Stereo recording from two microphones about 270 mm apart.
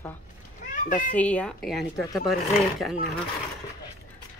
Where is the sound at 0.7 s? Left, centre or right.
Left.